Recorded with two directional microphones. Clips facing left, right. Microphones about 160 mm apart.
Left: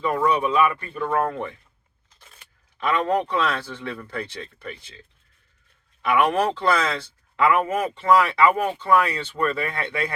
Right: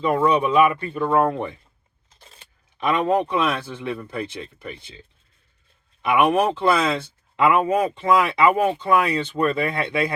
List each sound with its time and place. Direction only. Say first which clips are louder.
0.0 s speech: right 3 dB; 20° right (ahead or behind)
2.1 s a sound: right 3 dB; 30° right (ahead or behind)
2.8 s speech: right 2 dB; 15° right (ahead or behind)